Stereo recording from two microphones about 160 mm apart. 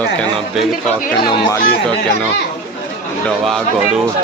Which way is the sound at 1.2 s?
25° left (ahead or behind).